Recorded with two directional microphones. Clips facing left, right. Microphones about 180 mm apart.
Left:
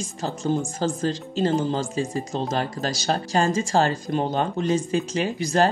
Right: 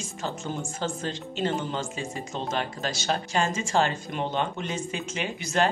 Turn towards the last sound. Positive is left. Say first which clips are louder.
# left 5 dB
turn(degrees=35)  # may be behind; listen again after turning